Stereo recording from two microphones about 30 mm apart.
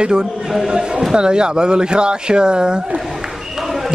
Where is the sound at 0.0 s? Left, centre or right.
Right.